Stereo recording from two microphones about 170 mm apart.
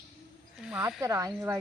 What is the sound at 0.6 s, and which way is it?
Speech, 5° right (ahead or behind).